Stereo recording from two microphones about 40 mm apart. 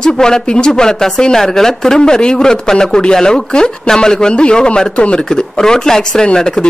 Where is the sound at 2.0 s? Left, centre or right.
Left.